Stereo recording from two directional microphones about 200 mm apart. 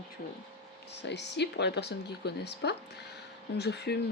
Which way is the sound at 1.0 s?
60° left (ahead or behind).